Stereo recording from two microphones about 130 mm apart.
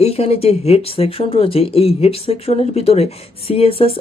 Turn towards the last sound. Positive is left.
turn(degrees=50)  # may be behind; listen again after turning